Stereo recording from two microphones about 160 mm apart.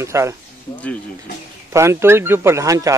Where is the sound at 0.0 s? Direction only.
15° right (ahead or behind).